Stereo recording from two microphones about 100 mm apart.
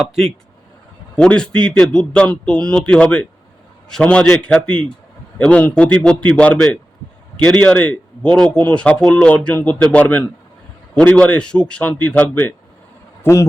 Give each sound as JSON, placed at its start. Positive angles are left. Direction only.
{"t": 1.1, "sound": "a man's voice", "side_deg": 10}